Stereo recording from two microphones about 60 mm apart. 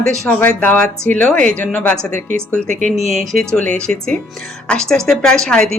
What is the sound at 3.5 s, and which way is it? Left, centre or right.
A woman's voice, left.